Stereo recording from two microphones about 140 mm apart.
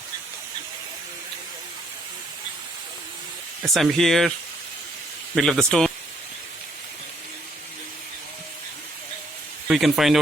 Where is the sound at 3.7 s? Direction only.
Centre (ahead or behind).